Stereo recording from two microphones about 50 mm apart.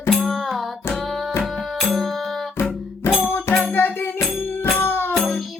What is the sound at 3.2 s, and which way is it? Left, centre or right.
Music, left.